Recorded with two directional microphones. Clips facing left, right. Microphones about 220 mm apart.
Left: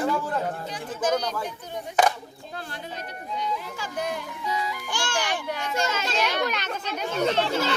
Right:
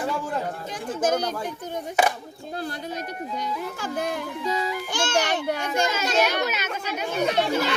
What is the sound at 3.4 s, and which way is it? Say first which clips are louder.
Speech: left 1 dB; 50° right (ahead or behind).